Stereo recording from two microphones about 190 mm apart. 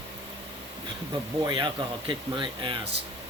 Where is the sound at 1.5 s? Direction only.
25° right (ahead or behind).